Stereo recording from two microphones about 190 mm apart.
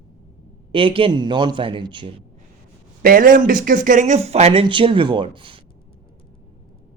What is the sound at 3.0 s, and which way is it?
Speech, 50° right (ahead or behind).